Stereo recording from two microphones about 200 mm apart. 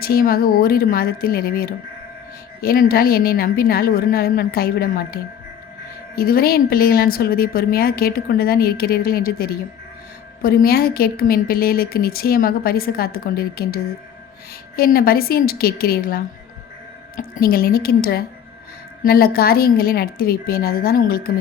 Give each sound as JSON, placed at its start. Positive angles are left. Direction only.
{"t": 0.0, "sound": "a woman's voice", "side_deg": 50}
{"t": 14.8, "sound": "a woman's voice", "side_deg": 50}